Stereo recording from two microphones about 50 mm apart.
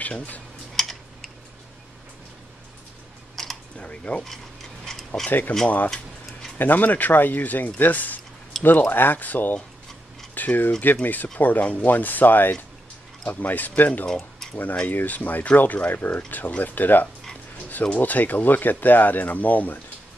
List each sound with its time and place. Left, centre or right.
0.0 s speech: left
0.7 s typing: centre
3.4 s typing: centre
3.7 s speech: left
4.8 s mechanisms: centre
6.6 s speech: left
14.0 s tick-tock: centre
14.5 s speech: left